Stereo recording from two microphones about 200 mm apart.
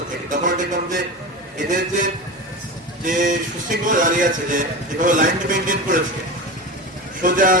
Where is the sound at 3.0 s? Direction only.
40° right (ahead or behind).